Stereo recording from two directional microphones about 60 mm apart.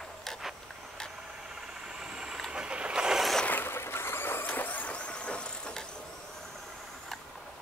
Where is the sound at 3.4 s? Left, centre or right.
Left; by 5.8 s centre.